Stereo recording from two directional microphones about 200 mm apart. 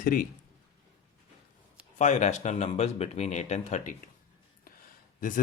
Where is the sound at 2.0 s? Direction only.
35° left (ahead or behind).